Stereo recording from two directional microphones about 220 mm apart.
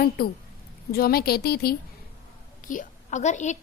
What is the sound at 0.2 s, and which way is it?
A woman's voice, 45° left (ahead or behind).